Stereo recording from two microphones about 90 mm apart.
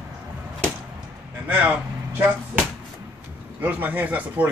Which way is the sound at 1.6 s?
20° right (ahead or behind).